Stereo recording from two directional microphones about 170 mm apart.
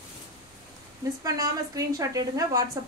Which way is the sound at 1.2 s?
20° right (ahead or behind).